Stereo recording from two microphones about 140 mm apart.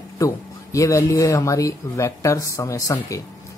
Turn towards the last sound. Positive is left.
turn(degrees=25)  # may be behind; listen again after turning